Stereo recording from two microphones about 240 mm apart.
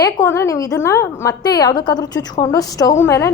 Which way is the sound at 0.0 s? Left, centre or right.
Centre.